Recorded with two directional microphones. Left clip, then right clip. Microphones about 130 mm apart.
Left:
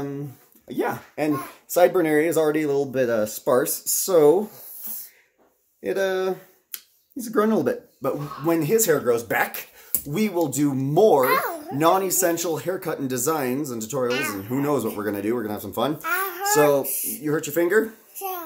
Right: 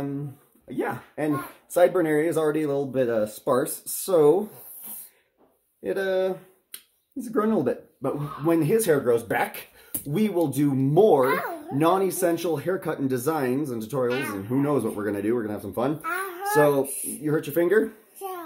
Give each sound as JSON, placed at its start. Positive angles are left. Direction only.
{"t": 0.7, "sound": "speech", "side_deg": 30}
{"t": 5.8, "sound": "speech", "side_deg": 30}
{"t": 8.0, "sound": "speech", "side_deg": -5}
{"t": 11.2, "sound": "speech", "side_deg": 35}
{"t": 11.8, "sound": "speech", "side_deg": 0}
{"t": 12.6, "sound": "speech", "side_deg": -15}
{"t": 14.0, "sound": "speech", "side_deg": 20}
{"t": 14.6, "sound": "speech", "side_deg": 0}
{"t": 16.0, "sound": "babbling", "side_deg": 35}
{"t": 16.5, "sound": "speech", "side_deg": -5}